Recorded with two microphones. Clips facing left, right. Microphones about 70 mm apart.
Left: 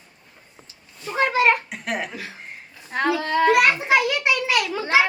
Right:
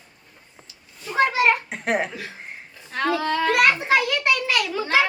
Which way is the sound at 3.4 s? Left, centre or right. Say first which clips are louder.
Left 2 dB; centre.